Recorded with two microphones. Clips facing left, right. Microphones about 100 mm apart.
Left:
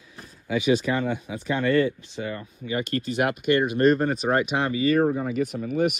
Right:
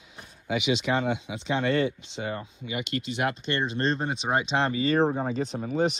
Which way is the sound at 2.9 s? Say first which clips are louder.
Left 4 dB; 45° left (ahead or behind).